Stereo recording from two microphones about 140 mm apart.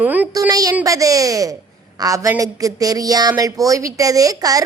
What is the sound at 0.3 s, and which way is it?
Speech, 25° right (ahead or behind).